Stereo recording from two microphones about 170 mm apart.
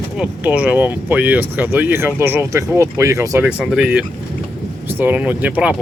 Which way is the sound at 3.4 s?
5° right (ahead or behind).